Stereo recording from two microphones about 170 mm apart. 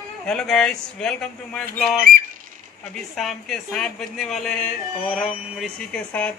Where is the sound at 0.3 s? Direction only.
5° left (ahead or behind).